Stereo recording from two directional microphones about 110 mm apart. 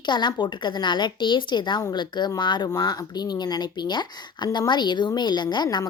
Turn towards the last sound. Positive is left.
turn(degrees=40)  # may be behind; listen again after turning